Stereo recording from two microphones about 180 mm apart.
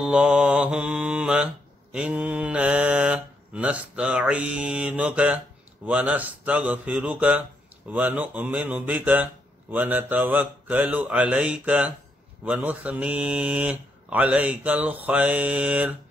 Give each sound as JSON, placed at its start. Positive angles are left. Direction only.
{"t": 0.0, "sound": "music", "side_deg": -5}
{"t": 5.9, "sound": "speech", "side_deg": -10}